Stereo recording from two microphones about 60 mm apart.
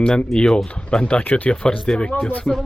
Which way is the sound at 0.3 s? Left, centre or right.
Centre.